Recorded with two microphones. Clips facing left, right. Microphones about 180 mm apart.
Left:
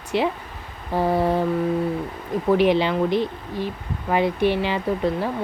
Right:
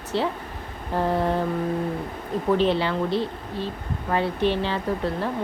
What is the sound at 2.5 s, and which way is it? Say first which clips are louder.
Speech: left 5 dB; 15° left (ahead or behind).